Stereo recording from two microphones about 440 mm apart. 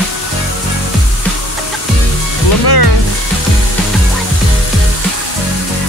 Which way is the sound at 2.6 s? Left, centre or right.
Left.